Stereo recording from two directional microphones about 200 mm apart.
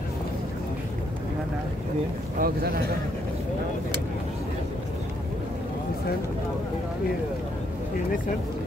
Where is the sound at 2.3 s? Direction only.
50° right (ahead or behind).